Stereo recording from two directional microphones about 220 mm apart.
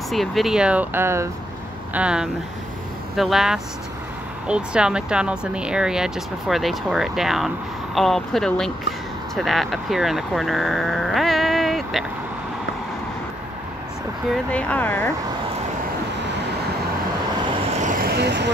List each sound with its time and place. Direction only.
0.1 s speech: centre (ahead or behind)
14.3 s speech: 5° left (ahead or behind)
17.8 s vehicle: 40° right (ahead or behind)